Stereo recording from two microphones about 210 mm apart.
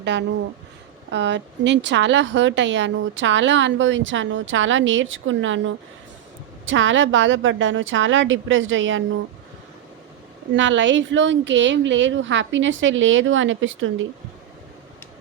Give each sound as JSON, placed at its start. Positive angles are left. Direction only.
{"t": 0.0, "sound": "a woman's voice", "side_deg": -55}
{"t": 10.5, "sound": "a woman's voice", "side_deg": -60}